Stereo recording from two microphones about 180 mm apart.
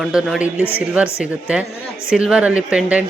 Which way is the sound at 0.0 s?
Centre (ahead or behind).